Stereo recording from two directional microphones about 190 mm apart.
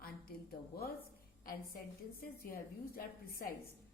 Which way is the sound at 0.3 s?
50° left (ahead or behind).